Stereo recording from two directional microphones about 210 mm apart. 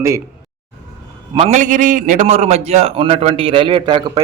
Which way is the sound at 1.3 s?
30° right (ahead or behind).